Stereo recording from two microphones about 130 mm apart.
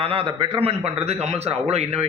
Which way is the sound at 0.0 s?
45° right (ahead or behind).